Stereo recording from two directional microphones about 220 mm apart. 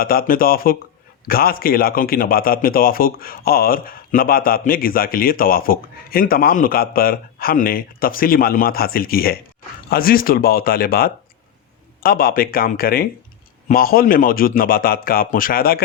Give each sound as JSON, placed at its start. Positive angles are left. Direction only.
{"t": 0.0, "sound": "a man's voice", "side_deg": 40}